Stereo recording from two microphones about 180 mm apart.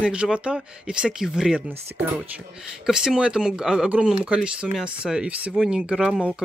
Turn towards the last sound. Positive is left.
turn(degrees=-5)  # may be behind; listen again after turning